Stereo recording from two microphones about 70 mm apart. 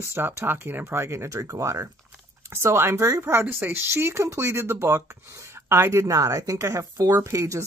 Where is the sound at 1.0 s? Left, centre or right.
Right.